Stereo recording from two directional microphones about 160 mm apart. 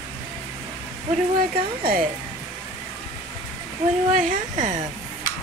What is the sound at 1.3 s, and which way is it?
Speech, 65° right (ahead or behind).